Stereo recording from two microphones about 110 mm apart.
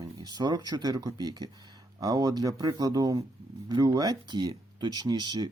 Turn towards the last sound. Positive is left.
turn(degrees=-40)  # may be behind; listen again after turning